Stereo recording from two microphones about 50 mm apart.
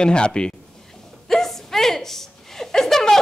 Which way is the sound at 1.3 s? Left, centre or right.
Centre.